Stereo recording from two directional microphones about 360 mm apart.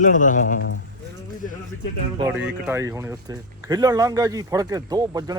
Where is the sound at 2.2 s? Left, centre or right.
Centre.